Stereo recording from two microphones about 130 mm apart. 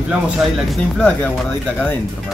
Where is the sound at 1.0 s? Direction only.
10° left (ahead or behind).